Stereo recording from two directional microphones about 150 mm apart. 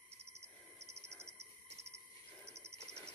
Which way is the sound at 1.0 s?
20° right (ahead or behind).